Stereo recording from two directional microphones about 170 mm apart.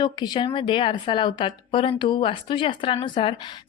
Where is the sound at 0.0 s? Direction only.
25° left (ahead or behind).